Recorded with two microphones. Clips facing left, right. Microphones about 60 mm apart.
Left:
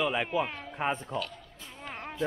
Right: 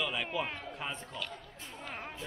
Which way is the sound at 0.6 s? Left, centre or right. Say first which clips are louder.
Left 8 dB; left.